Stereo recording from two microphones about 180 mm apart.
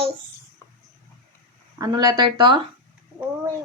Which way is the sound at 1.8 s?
20° right (ahead or behind).